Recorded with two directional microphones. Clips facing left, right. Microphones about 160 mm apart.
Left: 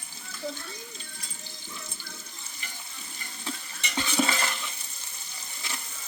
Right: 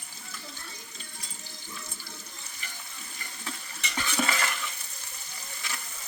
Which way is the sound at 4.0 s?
25° left (ahead or behind).